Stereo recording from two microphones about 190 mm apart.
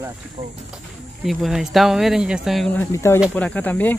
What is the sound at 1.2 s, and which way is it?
Speech, centre (ahead or behind).